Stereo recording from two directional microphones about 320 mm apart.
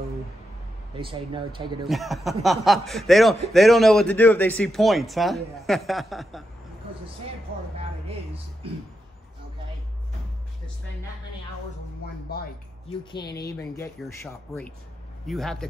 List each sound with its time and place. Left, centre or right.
0.9 s speech: centre
1.9 s speech: centre
13.2 s speech: left
13.5 s speech: centre